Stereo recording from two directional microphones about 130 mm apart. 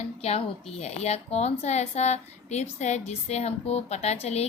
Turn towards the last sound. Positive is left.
turn(degrees=55)  # may be behind; listen again after turning